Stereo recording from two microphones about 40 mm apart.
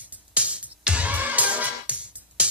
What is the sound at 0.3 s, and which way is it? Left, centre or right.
Music, right.